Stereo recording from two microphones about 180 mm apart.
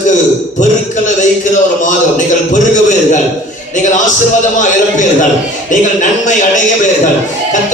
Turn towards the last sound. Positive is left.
turn(degrees=45)  # may be behind; listen again after turning